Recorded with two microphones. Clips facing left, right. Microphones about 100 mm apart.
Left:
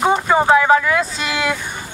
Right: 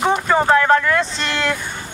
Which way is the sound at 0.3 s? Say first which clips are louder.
Left 1 dB; 10° left (ahead or behind).